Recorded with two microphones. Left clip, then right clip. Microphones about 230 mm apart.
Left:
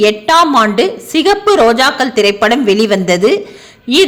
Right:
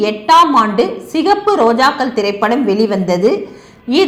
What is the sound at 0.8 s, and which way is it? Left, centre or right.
Speech, left.